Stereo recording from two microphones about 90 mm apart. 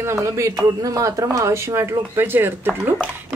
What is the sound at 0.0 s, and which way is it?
Speech, 35° right (ahead or behind).